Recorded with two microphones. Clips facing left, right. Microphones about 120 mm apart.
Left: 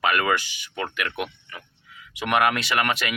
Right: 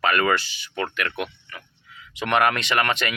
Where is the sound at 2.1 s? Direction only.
10° left (ahead or behind).